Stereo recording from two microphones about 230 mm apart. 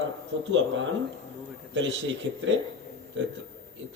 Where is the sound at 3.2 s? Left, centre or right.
Right.